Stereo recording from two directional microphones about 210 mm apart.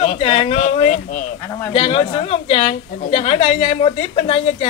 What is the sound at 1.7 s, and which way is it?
A woman's voice, 25° left (ahead or behind).